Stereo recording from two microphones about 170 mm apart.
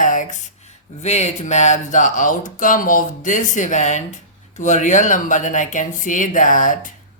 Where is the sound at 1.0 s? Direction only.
40° left (ahead or behind).